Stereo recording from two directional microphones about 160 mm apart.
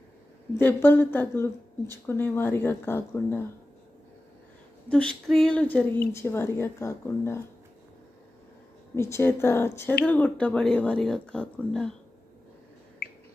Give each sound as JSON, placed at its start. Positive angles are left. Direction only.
{"t": 0.5, "sound": "a woman's voice", "side_deg": 10}
{"t": 4.9, "sound": "a woman's voice", "side_deg": 5}
{"t": 9.0, "sound": "a woman's voice", "side_deg": 15}
{"t": 13.0, "sound": "a sound", "side_deg": 90}